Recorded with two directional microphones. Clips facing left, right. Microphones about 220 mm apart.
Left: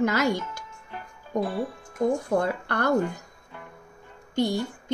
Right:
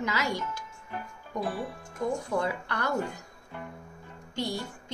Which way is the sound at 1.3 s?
45° left (ahead or behind).